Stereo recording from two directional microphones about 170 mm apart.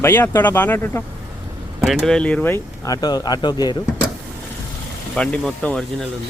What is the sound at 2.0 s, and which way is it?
Speech, 5° left (ahead or behind).